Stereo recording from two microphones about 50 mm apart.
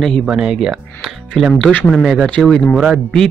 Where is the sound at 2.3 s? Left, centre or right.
Centre.